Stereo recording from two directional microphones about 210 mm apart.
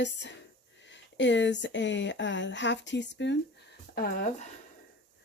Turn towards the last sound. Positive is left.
turn(degrees=45)  # may be behind; listen again after turning